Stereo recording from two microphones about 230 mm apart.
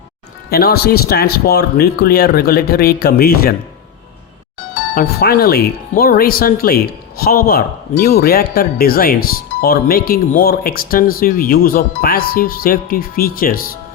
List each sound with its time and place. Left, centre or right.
0.5 s speech: left
4.9 s speech: left